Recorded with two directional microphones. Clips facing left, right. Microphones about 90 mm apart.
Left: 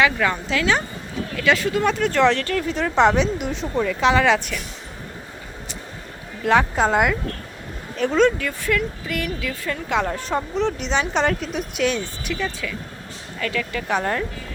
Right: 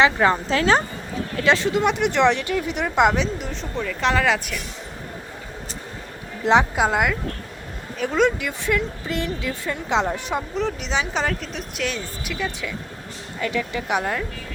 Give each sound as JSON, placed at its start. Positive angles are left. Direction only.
{"t": 0.0, "sound": "a woman's voice", "side_deg": -30}
{"t": 3.2, "sound": "speech", "side_deg": 5}
{"t": 6.4, "sound": "speech", "side_deg": -20}
{"t": 6.7, "sound": "a woman's voice", "side_deg": -5}
{"t": 10.5, "sound": "speech", "side_deg": 0}
{"t": 13.4, "sound": "speech", "side_deg": -20}
{"t": 14.0, "sound": "speech", "side_deg": -5}